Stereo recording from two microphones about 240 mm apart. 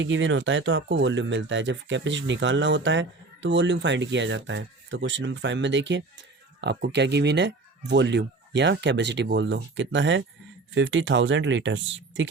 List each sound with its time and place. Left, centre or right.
0.0 s speech: right